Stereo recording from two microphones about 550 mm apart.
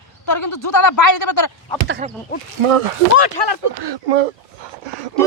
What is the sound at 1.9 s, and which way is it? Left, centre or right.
Speech, centre.